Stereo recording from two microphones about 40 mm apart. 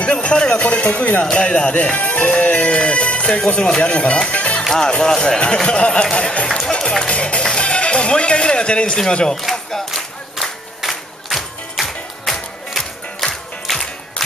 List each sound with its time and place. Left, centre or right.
0.0 s music: left
0.6 s speech: left
1.2 s speech: left
4.7 s speech: centre
7.0 s music: left
9.3 s a sound: centre
10.8 s a sound: centre
11.7 s music: centre